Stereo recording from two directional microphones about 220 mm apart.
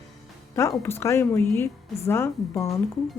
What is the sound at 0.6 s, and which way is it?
Speech, 10° left (ahead or behind).